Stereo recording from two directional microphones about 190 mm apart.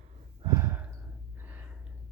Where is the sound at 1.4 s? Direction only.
10° right (ahead or behind).